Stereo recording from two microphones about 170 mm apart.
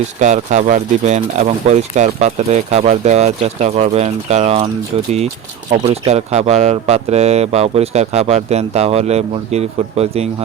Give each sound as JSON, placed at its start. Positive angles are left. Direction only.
{"t": 0.2, "sound": "speech", "side_deg": -45}
{"t": 5.7, "sound": "speech", "side_deg": -40}